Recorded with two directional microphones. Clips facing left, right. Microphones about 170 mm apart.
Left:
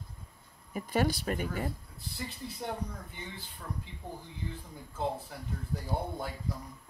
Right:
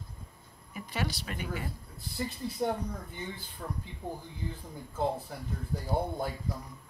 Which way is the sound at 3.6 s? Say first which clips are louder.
Right 3 dB; 40° right (ahead or behind).